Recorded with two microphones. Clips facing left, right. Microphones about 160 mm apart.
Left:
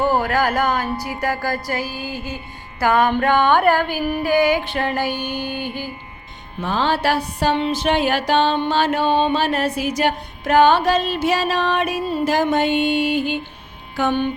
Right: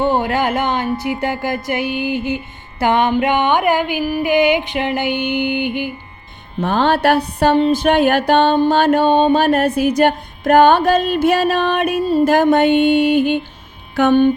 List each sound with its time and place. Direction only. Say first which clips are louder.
0.0 s speech: right 2 dB; 25° right (ahead or behind)
6.6 s music: right 5 dB; 55° right (ahead or behind)
13.9 s speech: right 7 dB; 55° right (ahead or behind)